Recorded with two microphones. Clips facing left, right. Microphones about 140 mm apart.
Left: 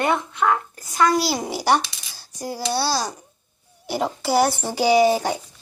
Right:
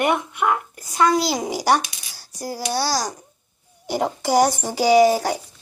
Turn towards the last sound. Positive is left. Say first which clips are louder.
# right 2 dB
turn(degrees=-10)  # may be behind; listen again after turning